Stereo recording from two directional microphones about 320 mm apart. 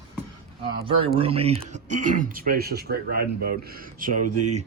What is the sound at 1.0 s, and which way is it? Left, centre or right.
Speech, centre.